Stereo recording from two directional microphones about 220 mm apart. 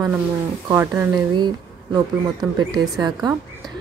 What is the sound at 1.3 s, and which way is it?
A woman's voice, 20° right (ahead or behind).